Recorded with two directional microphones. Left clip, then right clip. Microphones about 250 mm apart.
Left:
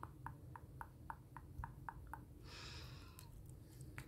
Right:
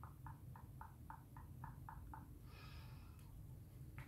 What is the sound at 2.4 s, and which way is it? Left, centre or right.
Snort, left.